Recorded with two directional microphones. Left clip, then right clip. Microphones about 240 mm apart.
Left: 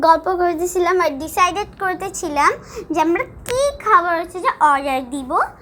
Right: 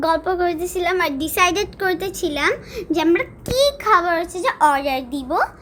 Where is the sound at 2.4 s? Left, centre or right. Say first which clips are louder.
Left 5 dB; centre.